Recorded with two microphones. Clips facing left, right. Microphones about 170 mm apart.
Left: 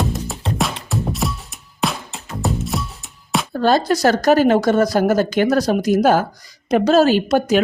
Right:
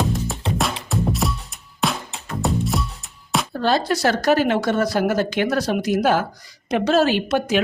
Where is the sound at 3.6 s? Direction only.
45° left (ahead or behind).